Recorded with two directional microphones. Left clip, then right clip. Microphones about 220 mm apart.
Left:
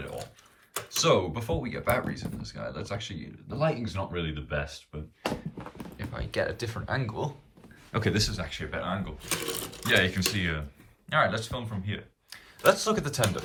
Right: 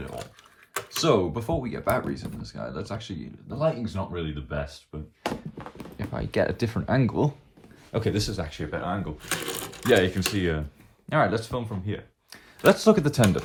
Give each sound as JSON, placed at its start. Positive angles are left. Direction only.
{"t": 0.7, "sound": "speech", "side_deg": -15}
{"t": 6.1, "sound": "speech", "side_deg": -25}
{"t": 7.9, "sound": "speech", "side_deg": -5}
{"t": 8.4, "sound": "speech", "side_deg": -20}
{"t": 9.5, "sound": "speech", "side_deg": -10}